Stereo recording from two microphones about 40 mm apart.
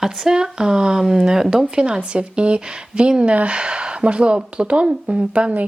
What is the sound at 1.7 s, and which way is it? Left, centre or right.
Speech, right.